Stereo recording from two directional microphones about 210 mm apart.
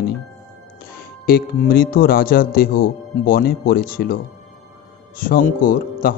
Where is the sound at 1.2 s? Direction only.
45° left (ahead or behind).